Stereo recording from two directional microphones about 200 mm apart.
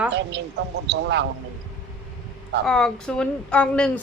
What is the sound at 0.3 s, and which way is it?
Speech, 60° right (ahead or behind).